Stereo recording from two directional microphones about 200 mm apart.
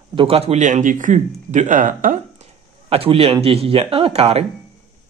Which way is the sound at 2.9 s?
30° right (ahead or behind).